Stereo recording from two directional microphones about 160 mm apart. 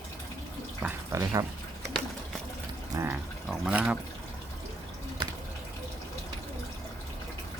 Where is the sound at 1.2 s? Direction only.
20° right (ahead or behind).